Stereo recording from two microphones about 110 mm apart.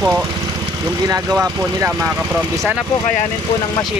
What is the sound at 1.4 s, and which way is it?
Speech, 15° right (ahead or behind).